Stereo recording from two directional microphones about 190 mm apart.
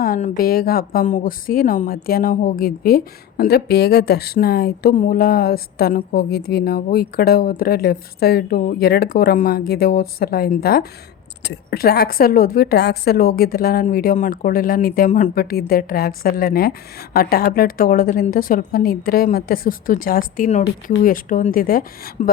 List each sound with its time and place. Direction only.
0.0 s a woman's voice: 50° left (ahead or behind)